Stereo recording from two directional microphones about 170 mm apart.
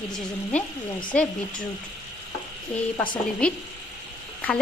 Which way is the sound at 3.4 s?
5° left (ahead or behind).